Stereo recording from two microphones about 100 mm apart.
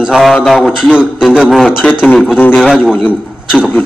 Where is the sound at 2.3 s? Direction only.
15° left (ahead or behind).